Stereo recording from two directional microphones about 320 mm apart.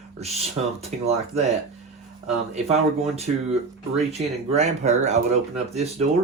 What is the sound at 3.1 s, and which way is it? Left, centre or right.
Speech, centre.